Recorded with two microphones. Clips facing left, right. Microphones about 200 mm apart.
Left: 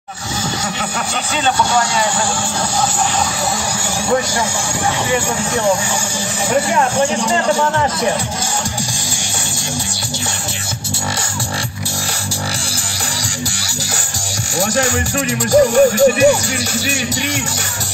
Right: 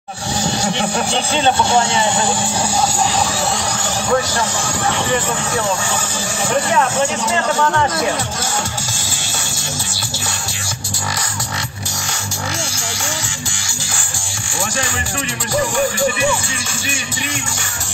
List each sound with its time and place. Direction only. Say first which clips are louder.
0.7 s speech: right 4 dB; 30° right (ahead or behind)
15.5 s music: left 8 dB; 40° left (ahead or behind)